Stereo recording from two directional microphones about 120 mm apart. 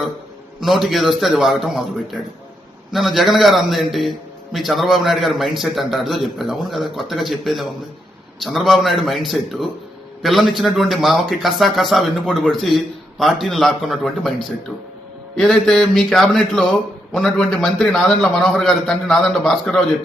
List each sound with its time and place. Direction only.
0.6 s speech: centre (ahead or behind)